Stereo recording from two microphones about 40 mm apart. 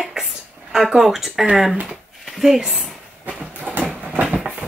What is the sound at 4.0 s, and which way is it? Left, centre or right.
Train, right.